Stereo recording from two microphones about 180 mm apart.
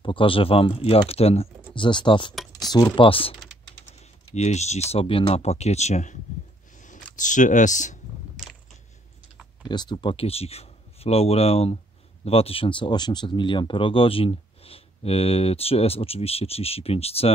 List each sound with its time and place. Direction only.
0.0 s speech: 30° left (ahead or behind)
2.3 s typing: centre (ahead or behind)
2.7 s speech: 25° left (ahead or behind)
4.4 s speech: 40° left (ahead or behind)
6.8 s a sound: 45° left (ahead or behind)
9.7 s speech: 25° left (ahead or behind)